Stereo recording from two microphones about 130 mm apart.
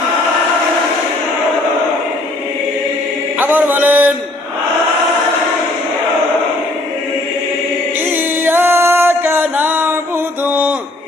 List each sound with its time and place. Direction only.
3.3 s mantra: 15° right (ahead or behind)
8.1 s music: 15° right (ahead or behind)
10.4 s a sound: 10° right (ahead or behind)